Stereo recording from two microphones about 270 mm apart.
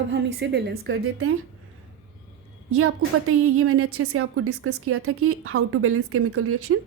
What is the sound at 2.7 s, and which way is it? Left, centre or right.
A woman's voice, right.